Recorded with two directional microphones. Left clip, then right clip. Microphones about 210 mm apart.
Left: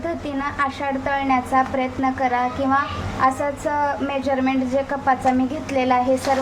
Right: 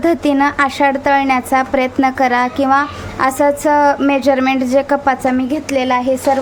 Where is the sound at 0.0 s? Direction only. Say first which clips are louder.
Right 12 dB; 55° right (ahead or behind).